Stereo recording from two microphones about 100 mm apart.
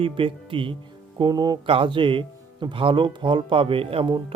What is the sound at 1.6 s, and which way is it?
Speech, 60° right (ahead or behind).